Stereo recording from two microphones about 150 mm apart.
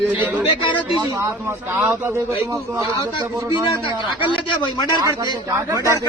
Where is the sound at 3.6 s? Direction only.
35° left (ahead or behind).